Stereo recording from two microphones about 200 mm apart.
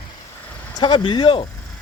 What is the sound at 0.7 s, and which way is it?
Speech, 25° left (ahead or behind).